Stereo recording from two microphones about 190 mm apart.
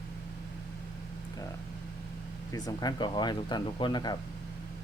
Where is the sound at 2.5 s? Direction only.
20° left (ahead or behind).